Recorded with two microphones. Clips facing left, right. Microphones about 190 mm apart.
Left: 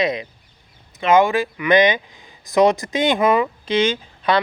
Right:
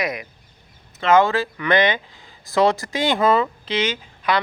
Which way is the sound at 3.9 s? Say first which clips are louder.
Left 3 dB; 30° left (ahead or behind).